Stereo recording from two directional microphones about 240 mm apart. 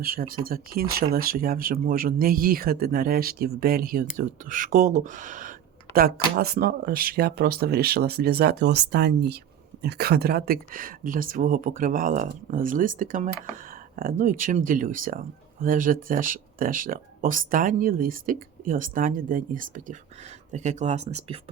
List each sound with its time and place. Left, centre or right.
0.0 s speech: right